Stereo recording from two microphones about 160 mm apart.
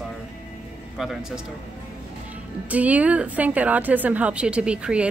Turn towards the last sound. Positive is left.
turn(degrees=-5)  # may be behind; listen again after turning